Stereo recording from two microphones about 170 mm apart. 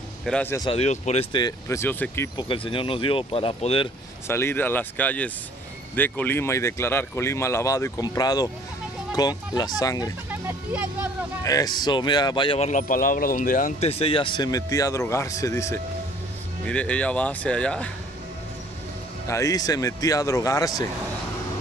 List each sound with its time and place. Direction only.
0.2 s speech: 10° left (ahead or behind)
0.6 s speech: 35° left (ahead or behind)
1.3 s speech: 20° left (ahead or behind)
2.3 s speech: 30° left (ahead or behind)
4.3 s speech: 15° left (ahead or behind)
10.4 s speech: 10° right (ahead or behind)
11.4 s speech: 20° left (ahead or behind); by 12.8 s 40° left (ahead or behind)
12.8 s speech: 55° left (ahead or behind); by 17.9 s 5° left (ahead or behind)
19.2 s speech: 20° left (ahead or behind)